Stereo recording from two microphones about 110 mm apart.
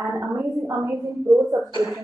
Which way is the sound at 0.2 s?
25° right (ahead or behind).